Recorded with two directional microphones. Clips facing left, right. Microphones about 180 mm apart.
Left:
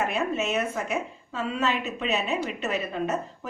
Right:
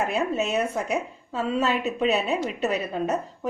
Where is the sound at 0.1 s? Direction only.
35° right (ahead or behind).